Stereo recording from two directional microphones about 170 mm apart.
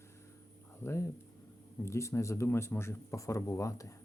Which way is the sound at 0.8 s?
15° left (ahead or behind).